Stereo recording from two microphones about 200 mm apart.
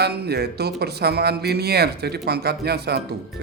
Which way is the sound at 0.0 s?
55° right (ahead or behind).